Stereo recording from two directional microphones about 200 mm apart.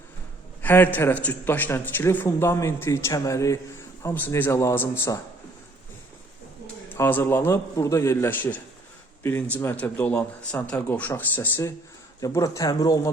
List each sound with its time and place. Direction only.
0.6 s a man's voice: 10° left (ahead or behind)
6.9 s a man's voice: 10° left (ahead or behind)